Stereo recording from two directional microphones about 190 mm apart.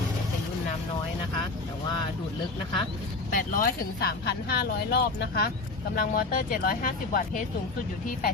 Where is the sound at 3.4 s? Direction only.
45° left (ahead or behind).